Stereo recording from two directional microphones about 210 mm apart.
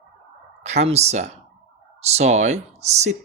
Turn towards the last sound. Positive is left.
turn(degrees=-30)  # may be behind; listen again after turning